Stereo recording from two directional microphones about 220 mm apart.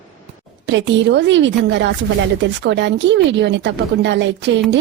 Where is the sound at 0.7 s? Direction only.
55° right (ahead or behind).